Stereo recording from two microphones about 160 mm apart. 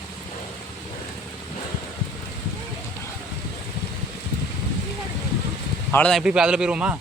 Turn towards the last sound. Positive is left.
turn(degrees=-5)  # may be behind; listen again after turning